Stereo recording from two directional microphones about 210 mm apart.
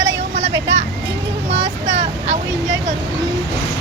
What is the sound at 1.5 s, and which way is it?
Speech, 55° right (ahead or behind).